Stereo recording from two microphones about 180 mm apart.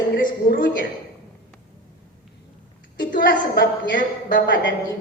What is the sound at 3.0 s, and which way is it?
A woman's voice, 50° left (ahead or behind).